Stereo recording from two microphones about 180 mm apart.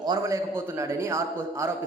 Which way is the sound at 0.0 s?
20° right (ahead or behind).